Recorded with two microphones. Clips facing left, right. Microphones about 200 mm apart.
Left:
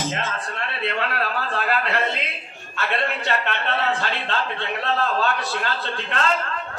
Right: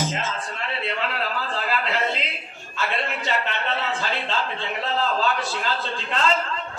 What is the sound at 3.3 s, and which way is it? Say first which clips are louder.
A man's voice: left 1 dB; 60° left (ahead or behind).